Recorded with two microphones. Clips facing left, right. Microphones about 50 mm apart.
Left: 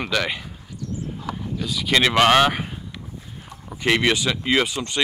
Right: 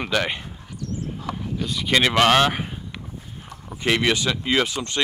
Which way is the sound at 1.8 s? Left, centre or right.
Centre.